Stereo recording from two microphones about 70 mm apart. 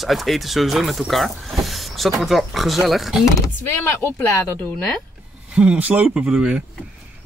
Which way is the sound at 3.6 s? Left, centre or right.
Left.